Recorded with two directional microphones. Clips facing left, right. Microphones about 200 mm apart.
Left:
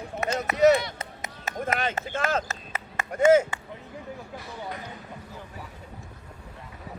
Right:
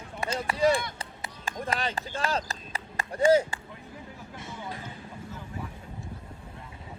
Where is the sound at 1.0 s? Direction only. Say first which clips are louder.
Left 3 dB; 30° right (ahead or behind).